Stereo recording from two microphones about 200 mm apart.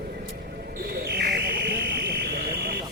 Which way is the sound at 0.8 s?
50° right (ahead or behind).